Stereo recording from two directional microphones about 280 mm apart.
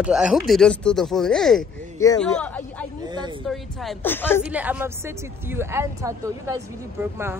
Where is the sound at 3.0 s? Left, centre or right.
Centre.